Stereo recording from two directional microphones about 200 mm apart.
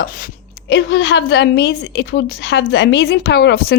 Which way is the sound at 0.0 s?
45° left (ahead or behind).